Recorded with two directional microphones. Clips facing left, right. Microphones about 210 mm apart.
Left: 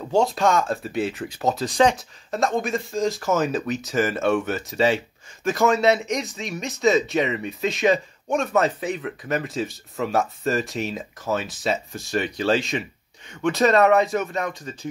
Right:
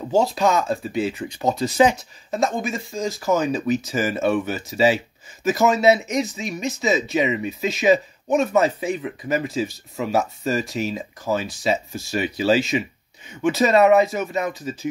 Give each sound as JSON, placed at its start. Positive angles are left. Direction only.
{"t": 0.1, "sound": "speech", "side_deg": 0}